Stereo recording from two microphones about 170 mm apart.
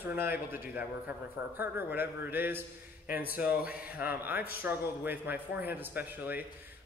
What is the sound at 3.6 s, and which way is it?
A man's voice, 10° right (ahead or behind).